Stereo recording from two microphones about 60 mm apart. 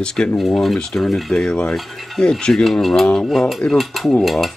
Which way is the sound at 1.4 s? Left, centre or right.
Centre.